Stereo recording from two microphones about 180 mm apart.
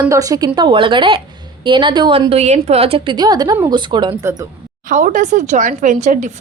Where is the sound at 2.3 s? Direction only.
40° right (ahead or behind); by 4.5 s 20° right (ahead or behind).